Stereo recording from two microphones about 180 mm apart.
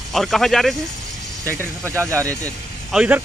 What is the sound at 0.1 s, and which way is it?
Speech, centre (ahead or behind).